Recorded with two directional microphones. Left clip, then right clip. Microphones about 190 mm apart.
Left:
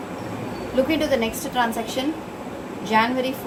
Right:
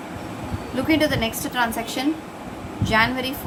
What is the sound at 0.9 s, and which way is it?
A woman's voice, 25° right (ahead or behind).